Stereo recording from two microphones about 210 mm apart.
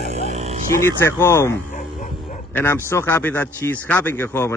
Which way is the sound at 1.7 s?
35° left (ahead or behind).